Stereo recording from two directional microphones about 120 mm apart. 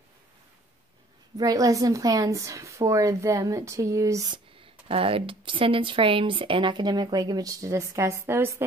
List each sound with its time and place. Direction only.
1.4 s a woman's voice: 30° right (ahead or behind)
4.3 s speech: 50° right (ahead or behind); by 8.6 s 20° right (ahead or behind)